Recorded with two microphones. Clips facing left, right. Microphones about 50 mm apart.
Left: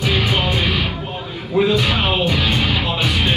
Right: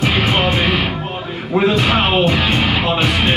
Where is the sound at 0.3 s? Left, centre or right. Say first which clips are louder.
Right 3 dB; right.